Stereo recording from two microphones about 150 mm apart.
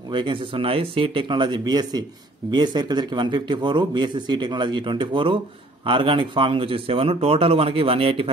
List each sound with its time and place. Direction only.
0.1 s a man's voice: 35° right (ahead or behind)